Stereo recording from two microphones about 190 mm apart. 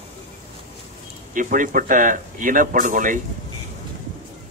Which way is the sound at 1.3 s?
45° right (ahead or behind).